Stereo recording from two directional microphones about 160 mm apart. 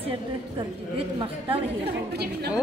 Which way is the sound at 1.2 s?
35° right (ahead or behind).